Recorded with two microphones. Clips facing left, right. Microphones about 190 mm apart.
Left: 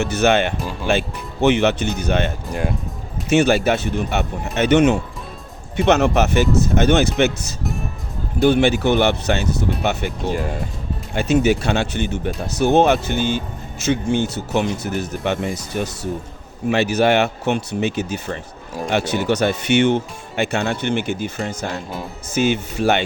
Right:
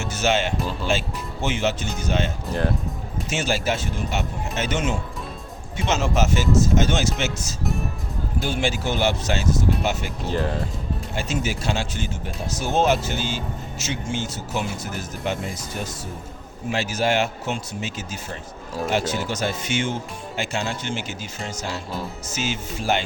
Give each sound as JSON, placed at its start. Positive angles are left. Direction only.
{"t": 0.0, "sound": "speech", "side_deg": 60}
{"t": 11.1, "sound": "speech", "side_deg": 65}
{"t": 16.7, "sound": "speech", "side_deg": 65}